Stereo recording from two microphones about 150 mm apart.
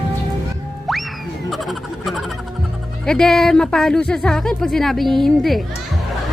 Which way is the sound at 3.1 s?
5° left (ahead or behind).